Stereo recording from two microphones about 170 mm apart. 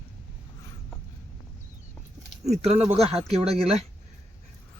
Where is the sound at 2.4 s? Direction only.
40° right (ahead or behind).